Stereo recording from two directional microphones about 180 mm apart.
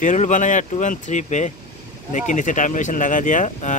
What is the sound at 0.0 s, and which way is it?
Speech, 45° left (ahead or behind).